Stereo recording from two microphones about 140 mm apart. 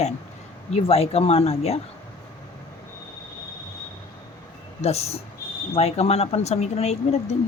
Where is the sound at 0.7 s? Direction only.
45° left (ahead or behind).